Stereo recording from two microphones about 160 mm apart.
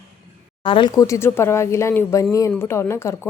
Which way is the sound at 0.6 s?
30° left (ahead or behind).